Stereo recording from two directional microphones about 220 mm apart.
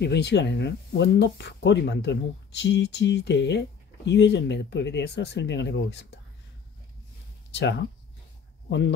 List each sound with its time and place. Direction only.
0.0 s speech: 50° left (ahead or behind)
8.6 s speech: 50° left (ahead or behind)